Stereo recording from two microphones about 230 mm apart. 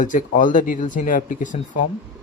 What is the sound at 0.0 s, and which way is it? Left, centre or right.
Speech, left.